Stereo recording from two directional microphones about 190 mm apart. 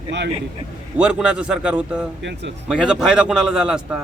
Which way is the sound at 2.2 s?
65° right (ahead or behind).